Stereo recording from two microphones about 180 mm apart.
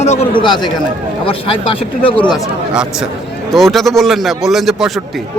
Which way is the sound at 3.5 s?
Centre (ahead or behind).